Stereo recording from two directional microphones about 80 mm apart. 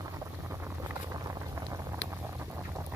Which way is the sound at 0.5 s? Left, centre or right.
Right.